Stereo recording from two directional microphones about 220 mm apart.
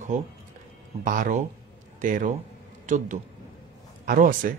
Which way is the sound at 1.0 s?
40° right (ahead or behind).